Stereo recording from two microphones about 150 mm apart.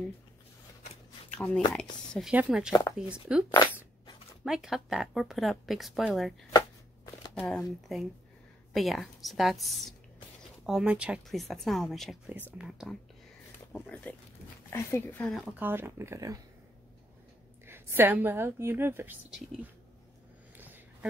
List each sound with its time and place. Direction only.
1.3 s a woman's voice: 10° left (ahead or behind)
7.4 s speech: 5° left (ahead or behind)
12.3 s a woman's voice: 10° right (ahead or behind)
13.7 s speech: 10° left (ahead or behind)
15.6 s a woman's voice: 15° right (ahead or behind)
17.6 s a woman's voice: 15° right (ahead or behind)
20.5 s a sound: 10° right (ahead or behind)